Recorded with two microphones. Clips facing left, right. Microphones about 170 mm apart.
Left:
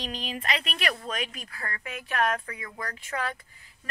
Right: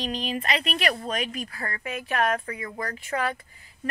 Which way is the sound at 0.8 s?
40° right (ahead or behind).